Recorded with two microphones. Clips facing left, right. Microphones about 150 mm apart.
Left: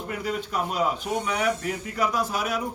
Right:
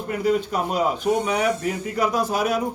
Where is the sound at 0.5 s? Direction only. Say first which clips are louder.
Right 3 dB; 20° right (ahead or behind).